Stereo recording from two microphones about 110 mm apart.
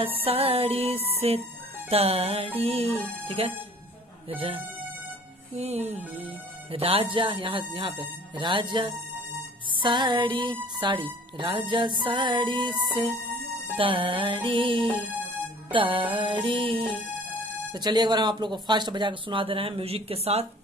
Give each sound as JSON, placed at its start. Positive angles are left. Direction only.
{"t": 0.0, "sound": "music", "side_deg": -60}
{"t": 5.5, "sound": "speech", "side_deg": -80}
{"t": 6.7, "sound": "speech", "side_deg": -60}
{"t": 13.7, "sound": "speech", "side_deg": -55}